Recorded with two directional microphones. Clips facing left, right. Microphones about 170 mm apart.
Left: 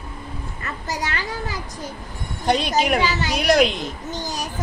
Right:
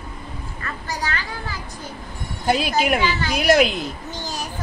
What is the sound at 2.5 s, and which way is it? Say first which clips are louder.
Speech: even; 5° right (ahead or behind).